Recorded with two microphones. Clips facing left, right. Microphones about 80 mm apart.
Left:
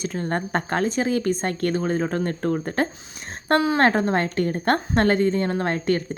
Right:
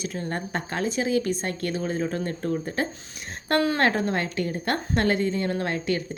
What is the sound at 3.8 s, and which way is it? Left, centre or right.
A woman's voice, left.